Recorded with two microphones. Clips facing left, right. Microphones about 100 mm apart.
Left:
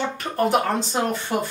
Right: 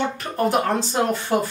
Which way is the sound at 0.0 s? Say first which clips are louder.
Right 1 dB; centre (ahead or behind).